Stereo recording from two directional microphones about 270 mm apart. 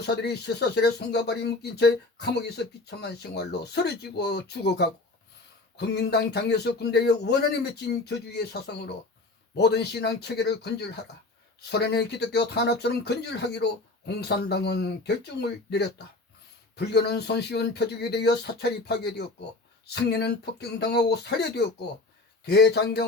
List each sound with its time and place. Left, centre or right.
0.0 s a man's voice: left